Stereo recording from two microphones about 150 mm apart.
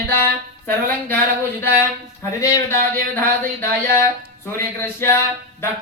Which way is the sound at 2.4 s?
20° left (ahead or behind).